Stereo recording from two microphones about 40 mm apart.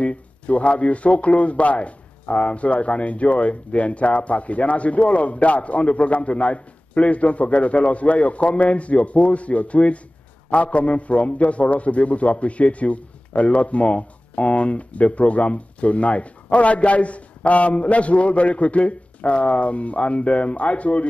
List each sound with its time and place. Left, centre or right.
0.0 s a man's voice: left